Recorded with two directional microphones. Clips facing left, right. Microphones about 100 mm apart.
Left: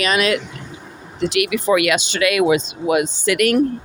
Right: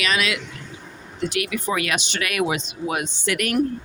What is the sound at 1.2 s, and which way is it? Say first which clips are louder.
Speech: left 6 dB; 85° left.